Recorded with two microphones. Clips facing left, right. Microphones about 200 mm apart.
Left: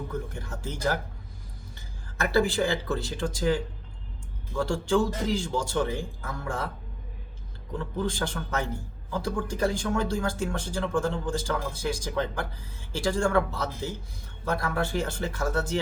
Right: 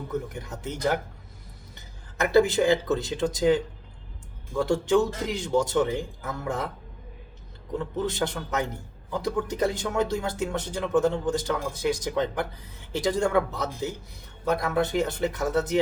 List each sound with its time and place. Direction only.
0.1 s speech: 20° right (ahead or behind)
2.1 s speech: 20° right (ahead or behind)
7.7 s speech: 20° right (ahead or behind)